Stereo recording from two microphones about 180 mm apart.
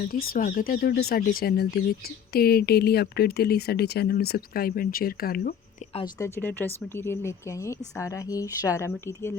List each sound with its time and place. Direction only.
0.0 s speech: 55° left (ahead or behind)
6.1 s speech: 15° left (ahead or behind)